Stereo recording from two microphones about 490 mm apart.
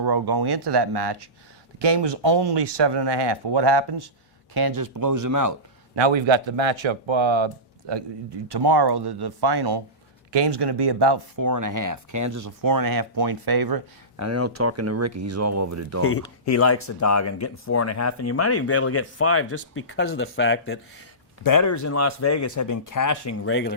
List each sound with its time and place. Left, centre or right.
0.0 s speech: right
5.9 s speech: right
11.3 s speech: right
14.3 s speech: right
16.0 s speech: left
21.4 s speech: left